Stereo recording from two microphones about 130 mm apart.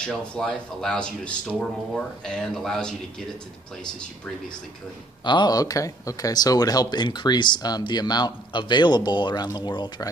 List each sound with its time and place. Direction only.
0.0 s speech: 5° left (ahead or behind)
5.2 s speech: 35° left (ahead or behind)